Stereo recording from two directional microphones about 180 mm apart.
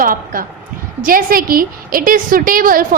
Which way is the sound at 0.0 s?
50° right (ahead or behind).